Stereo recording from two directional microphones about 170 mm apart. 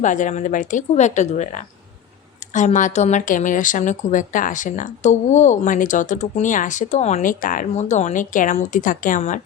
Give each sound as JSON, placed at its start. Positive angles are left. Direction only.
{"t": 0.0, "sound": "speech", "side_deg": 45}